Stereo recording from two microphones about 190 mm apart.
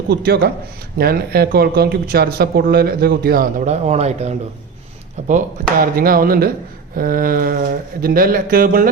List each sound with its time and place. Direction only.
0.1 s a man's voice: 55° right (ahead or behind); by 4.4 s 35° right (ahead or behind)
5.8 s speech: 50° right (ahead or behind)